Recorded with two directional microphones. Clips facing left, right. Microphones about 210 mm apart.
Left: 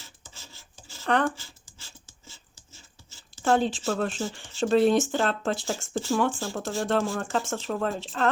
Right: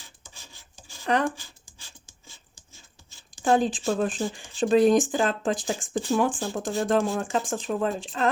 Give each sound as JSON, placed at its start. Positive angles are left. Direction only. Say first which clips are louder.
{"t": 0.0, "sound": "rub", "louder": "left 1 dB", "side_deg": -15}
{"t": 3.7, "sound": "speech", "louder": "right 2 dB", "side_deg": -15}